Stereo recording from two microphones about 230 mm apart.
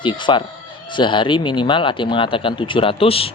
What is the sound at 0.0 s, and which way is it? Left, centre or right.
Speech, left.